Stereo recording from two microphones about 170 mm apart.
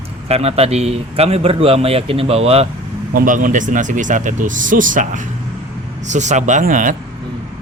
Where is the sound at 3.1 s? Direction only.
50° right (ahead or behind).